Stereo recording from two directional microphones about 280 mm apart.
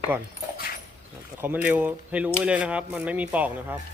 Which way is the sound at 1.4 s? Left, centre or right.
Centre.